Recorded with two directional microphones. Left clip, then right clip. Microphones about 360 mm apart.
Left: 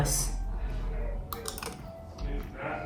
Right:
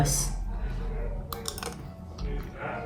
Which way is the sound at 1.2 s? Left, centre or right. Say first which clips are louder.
Right 2 dB; centre.